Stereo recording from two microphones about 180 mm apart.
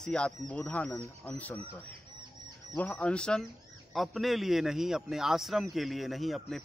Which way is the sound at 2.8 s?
5° left (ahead or behind).